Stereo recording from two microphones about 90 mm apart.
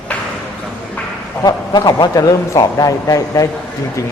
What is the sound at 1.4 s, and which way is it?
A man's voice, 45° left (ahead or behind).